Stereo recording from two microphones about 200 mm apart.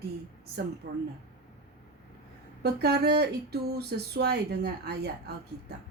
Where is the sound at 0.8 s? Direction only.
50° right (ahead or behind).